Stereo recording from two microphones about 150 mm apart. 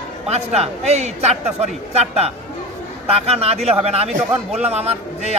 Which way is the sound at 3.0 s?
40° right (ahead or behind).